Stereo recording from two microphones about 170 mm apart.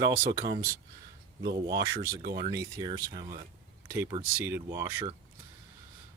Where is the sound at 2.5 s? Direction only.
20° right (ahead or behind).